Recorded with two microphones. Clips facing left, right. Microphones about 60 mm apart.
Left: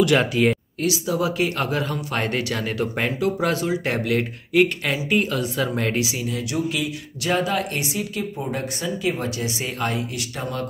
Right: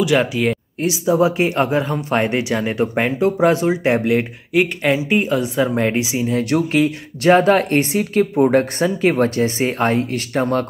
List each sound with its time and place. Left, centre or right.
0.0 s speech: centre
0.7 s speech: right
6.5 s speech: right